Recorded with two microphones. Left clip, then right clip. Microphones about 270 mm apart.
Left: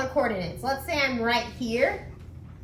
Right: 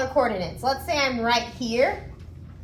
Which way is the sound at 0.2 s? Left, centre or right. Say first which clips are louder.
Right 4 dB; centre.